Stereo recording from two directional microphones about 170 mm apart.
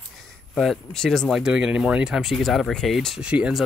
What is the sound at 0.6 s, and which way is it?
Speech, centre (ahead or behind).